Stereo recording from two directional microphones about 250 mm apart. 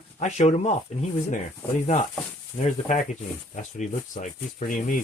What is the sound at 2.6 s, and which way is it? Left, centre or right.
Speech, left.